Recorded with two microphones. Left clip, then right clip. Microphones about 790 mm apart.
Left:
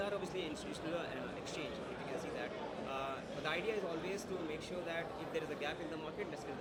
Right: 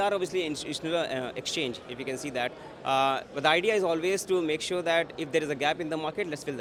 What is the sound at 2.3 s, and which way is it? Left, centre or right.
A man's voice, right.